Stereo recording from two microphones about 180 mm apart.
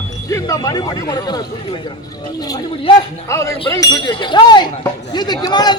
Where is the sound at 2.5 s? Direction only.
30° left (ahead or behind).